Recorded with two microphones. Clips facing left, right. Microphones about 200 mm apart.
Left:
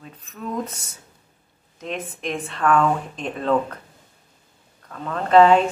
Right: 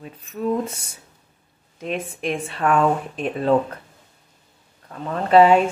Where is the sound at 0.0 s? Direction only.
10° right (ahead or behind).